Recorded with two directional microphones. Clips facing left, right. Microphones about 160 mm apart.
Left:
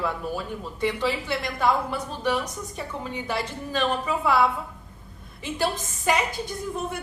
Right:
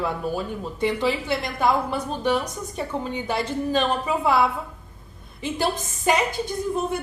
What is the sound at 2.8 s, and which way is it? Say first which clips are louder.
A woman's voice: right 6 dB; 25° right (ahead or behind).